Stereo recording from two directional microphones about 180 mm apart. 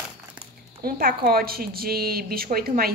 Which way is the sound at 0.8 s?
55° right (ahead or behind).